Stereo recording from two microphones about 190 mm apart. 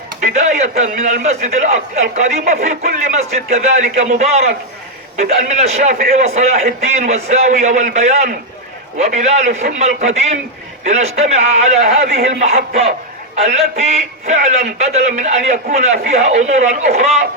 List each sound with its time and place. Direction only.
0.2 s a man's voice: 40° right (ahead or behind)